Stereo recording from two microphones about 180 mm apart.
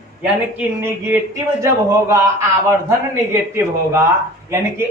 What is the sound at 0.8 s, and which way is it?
Speech, 15° right (ahead or behind).